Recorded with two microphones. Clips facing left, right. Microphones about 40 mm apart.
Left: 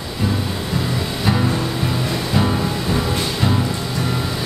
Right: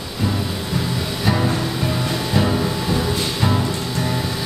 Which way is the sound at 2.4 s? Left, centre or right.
Centre.